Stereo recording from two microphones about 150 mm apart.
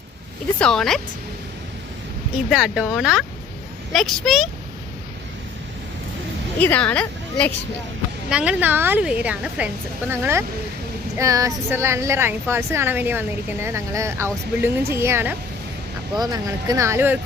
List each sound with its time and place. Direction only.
0.6 s speech: 5° left (ahead or behind)
2.3 s speech: 5° right (ahead or behind)
6.6 s speech: 10° left (ahead or behind)
8.3 s a woman's voice: 10° right (ahead or behind)
16.1 s speech: 25° right (ahead or behind)